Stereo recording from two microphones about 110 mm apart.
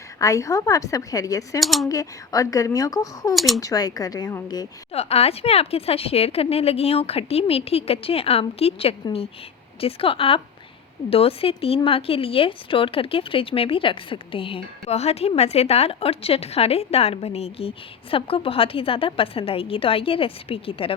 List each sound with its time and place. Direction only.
0.2 s speech: 30° left (ahead or behind)
1.6 s speech: centre (ahead or behind)
1.9 s speech: 30° left (ahead or behind)
3.3 s speech: centre (ahead or behind)
3.6 s speech: 35° left (ahead or behind)
4.9 s speech: 70° left (ahead or behind)